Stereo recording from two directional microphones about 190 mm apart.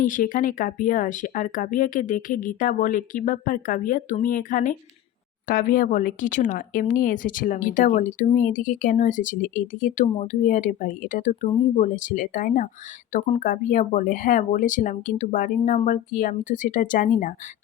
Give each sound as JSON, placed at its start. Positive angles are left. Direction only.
{"t": 0.0, "sound": "speech", "side_deg": 45}